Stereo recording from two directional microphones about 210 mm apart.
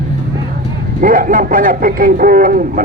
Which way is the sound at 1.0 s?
40° right (ahead or behind).